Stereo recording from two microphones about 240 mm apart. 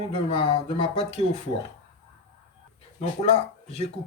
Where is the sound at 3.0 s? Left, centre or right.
Left.